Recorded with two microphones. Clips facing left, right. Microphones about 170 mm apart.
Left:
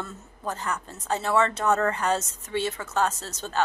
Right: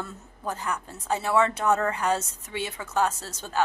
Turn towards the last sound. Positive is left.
turn(degrees=-10)  # may be behind; listen again after turning